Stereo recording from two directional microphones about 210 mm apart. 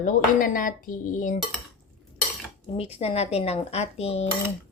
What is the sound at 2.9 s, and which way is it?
Speech, 30° left (ahead or behind).